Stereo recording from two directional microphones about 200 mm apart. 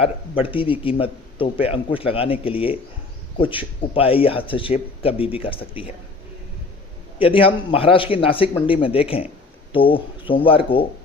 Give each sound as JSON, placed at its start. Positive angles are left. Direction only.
{"t": 0.0, "sound": "speech", "side_deg": 25}
{"t": 7.2, "sound": "speech", "side_deg": 25}